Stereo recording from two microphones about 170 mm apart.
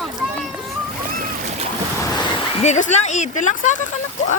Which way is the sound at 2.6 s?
45° left (ahead or behind).